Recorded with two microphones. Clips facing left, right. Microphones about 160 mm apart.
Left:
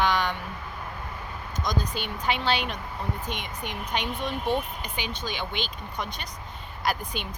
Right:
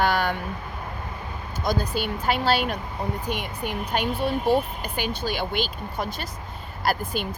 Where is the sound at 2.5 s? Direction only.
5° right (ahead or behind).